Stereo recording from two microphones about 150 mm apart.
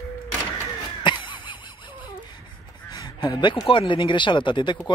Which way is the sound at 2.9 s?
25° left (ahead or behind).